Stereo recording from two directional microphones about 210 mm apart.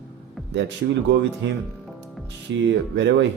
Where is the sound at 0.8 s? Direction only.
50° right (ahead or behind).